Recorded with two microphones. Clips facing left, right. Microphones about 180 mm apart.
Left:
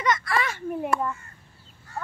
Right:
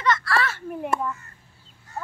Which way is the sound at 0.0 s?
20° left (ahead or behind).